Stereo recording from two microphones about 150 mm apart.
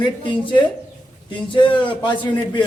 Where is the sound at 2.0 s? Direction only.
30° left (ahead or behind).